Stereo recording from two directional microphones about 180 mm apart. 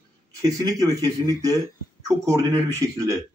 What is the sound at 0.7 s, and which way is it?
A man's voice, 20° right (ahead or behind).